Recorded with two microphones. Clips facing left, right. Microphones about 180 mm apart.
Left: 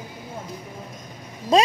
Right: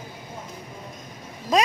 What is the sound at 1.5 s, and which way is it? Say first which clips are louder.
Speech: left 3 dB; 30° left (ahead or behind).